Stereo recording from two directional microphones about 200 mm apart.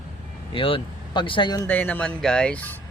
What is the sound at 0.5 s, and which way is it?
Speech, 25° left (ahead or behind).